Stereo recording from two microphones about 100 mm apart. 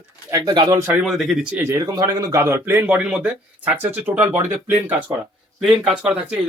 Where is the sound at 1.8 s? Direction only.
40° right (ahead or behind); by 2.8 s 25° right (ahead or behind).